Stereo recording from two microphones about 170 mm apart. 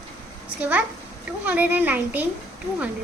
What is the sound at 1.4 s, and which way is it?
Speech, 10° right (ahead or behind).